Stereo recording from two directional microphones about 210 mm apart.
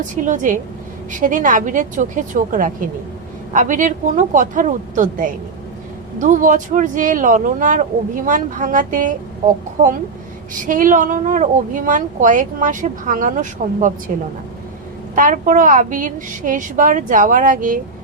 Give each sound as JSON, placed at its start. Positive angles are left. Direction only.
{"t": 0.3, "sound": "a woman's voice", "side_deg": -40}
{"t": 15.1, "sound": "a woman's voice", "side_deg": -40}